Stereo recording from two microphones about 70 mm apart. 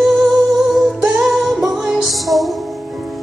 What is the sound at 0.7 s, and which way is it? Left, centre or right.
Music, centre.